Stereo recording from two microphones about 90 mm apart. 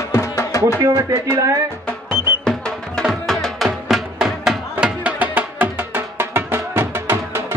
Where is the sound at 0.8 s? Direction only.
35° right (ahead or behind).